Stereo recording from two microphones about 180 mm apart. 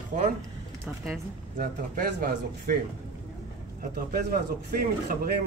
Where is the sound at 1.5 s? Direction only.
50° right (ahead or behind).